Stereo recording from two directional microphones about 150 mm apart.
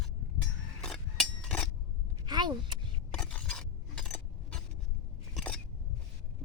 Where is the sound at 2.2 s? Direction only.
30° right (ahead or behind).